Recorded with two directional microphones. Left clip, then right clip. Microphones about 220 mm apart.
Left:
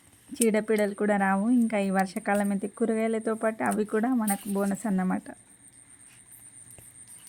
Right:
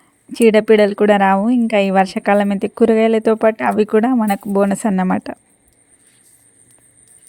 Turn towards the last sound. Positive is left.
turn(degrees=-40)  # may be behind; listen again after turning